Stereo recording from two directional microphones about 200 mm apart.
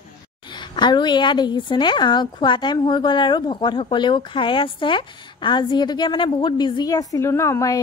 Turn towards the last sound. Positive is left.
turn(degrees=15)  # may be behind; listen again after turning